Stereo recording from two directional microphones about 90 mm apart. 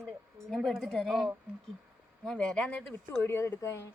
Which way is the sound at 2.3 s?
10° left (ahead or behind).